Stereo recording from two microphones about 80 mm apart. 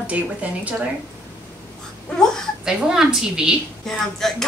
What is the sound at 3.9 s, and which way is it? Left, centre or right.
Speech, centre.